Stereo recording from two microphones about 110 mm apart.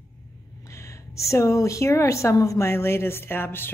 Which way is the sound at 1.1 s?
25° left (ahead or behind).